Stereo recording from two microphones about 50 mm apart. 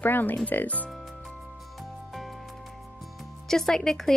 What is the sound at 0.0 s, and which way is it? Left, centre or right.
Speech, left.